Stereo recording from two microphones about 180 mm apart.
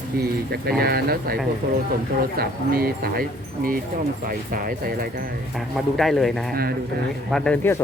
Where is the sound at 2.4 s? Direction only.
55° right (ahead or behind).